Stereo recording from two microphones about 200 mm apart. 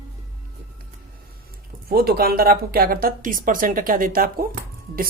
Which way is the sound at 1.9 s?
50° right (ahead or behind).